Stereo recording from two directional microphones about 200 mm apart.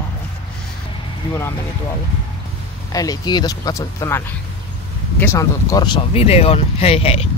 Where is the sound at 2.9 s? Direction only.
20° left (ahead or behind).